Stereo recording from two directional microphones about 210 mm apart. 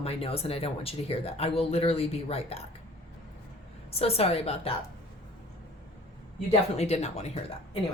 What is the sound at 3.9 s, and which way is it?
Speech, 30° left (ahead or behind).